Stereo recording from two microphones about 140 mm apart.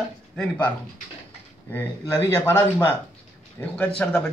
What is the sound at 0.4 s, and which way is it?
Speech, 10° left (ahead or behind).